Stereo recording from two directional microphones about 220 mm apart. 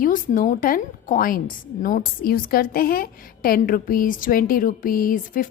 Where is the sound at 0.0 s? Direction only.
40° left (ahead or behind).